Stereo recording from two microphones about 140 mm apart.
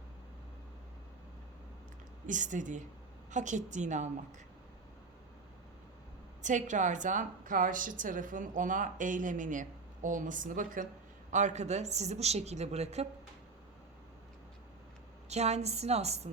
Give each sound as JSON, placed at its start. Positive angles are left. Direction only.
{"t": 2.2, "sound": "a woman's voice", "side_deg": -65}
{"t": 6.4, "sound": "a woman's voice", "side_deg": -60}
{"t": 11.3, "sound": "a woman's voice", "side_deg": -60}
{"t": 15.3, "sound": "a woman's voice", "side_deg": -50}